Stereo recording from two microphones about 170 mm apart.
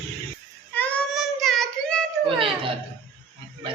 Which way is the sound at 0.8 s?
5° left (ahead or behind).